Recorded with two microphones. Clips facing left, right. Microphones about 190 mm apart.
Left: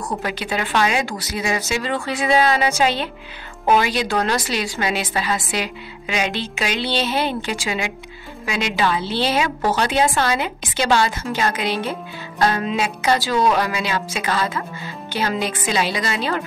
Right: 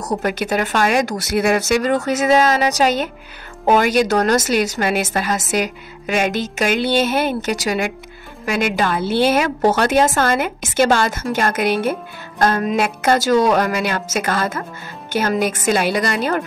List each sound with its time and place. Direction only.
0.0 s a woman's voice: 45° right (ahead or behind)
1.3 s a woman's voice: 60° right (ahead or behind)